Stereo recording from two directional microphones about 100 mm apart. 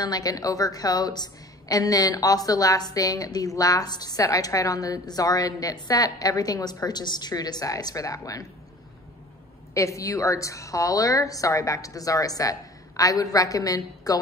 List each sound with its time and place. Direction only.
0.0 s a woman's voice: 40° left (ahead or behind)
9.8 s a woman's voice: 30° left (ahead or behind)